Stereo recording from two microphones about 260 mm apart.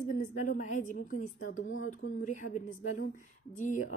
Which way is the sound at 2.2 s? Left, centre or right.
Left.